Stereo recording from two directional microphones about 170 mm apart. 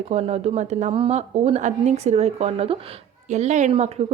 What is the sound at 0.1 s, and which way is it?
A woman's voice, 40° right (ahead or behind).